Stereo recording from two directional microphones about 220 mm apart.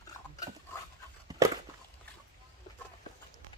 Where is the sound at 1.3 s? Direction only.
15° right (ahead or behind).